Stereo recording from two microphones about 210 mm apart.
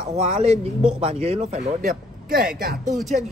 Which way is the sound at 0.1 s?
30° right (ahead or behind).